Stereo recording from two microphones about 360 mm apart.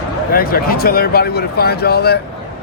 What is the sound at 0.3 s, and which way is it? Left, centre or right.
Speech, left.